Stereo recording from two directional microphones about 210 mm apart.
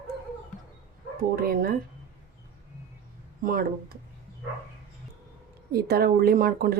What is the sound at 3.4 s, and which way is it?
Speech, 45° right (ahead or behind).